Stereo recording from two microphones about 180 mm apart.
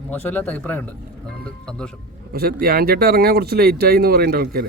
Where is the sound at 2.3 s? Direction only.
55° right (ahead or behind).